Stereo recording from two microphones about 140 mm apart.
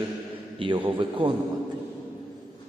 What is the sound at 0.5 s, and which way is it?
Speech, 40° right (ahead or behind).